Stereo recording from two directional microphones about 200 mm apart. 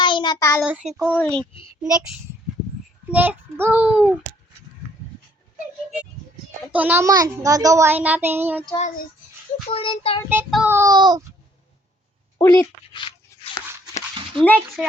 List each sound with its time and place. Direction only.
0.0 s child singing: 25° left (ahead or behind)
0.6 s child singing: 5° right (ahead or behind)
3.1 s a child's voice: 10° right (ahead or behind)
6.7 s a child's voice: 10° right (ahead or behind)
9.6 s child singing: 25° left (ahead or behind)
10.2 s a child's voice: 5° right (ahead or behind)
12.4 s dog: 15° left (ahead or behind)
14.3 s child singing: 5° left (ahead or behind)